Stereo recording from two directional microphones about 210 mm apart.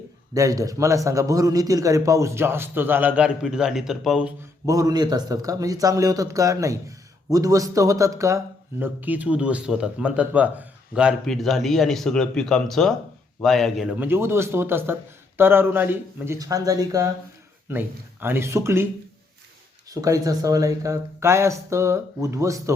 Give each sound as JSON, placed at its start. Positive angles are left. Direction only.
{"t": 0.3, "sound": "a man's voice", "side_deg": -15}
{"t": 4.6, "sound": "a man's voice", "side_deg": -15}
{"t": 19.9, "sound": "a man's voice", "side_deg": -15}